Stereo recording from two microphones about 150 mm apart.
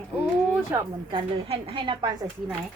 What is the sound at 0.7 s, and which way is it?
Speech, 15° right (ahead or behind).